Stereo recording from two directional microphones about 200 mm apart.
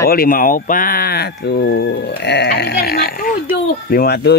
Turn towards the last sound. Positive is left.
turn(degrees=55)  # may be behind; listen again after turning